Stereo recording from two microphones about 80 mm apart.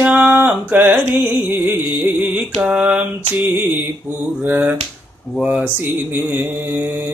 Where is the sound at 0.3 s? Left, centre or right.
Right.